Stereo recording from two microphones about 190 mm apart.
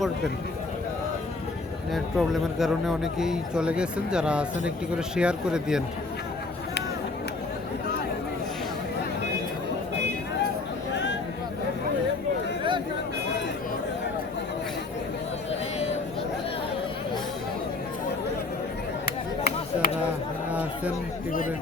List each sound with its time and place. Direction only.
1.9 s speech: centre (ahead or behind)
10.9 s a sound: 70° left (ahead or behind)
19.0 s chop: 55° left (ahead or behind)
20.5 s chatter: 5° right (ahead or behind)